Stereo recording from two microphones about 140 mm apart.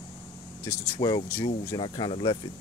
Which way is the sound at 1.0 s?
30° left (ahead or behind).